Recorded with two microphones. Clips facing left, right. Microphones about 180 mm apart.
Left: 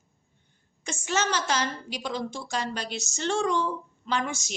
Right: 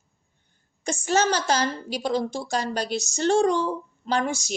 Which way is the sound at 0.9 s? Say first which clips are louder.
Right 6 dB; 35° right (ahead or behind).